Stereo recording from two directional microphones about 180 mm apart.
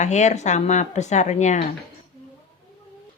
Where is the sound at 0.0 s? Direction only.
40° left (ahead or behind).